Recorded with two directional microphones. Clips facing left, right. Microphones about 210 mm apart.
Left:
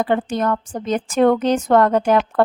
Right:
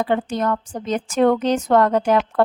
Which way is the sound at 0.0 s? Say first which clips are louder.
Left 1 dB; 50° left (ahead or behind).